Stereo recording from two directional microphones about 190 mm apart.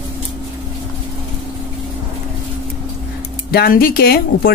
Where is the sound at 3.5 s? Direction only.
50° left (ahead or behind).